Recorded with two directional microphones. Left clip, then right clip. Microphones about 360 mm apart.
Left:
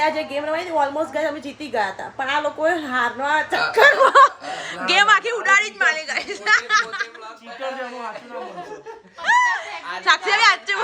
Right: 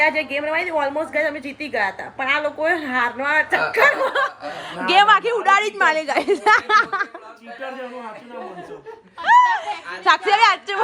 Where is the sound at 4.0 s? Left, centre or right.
Centre.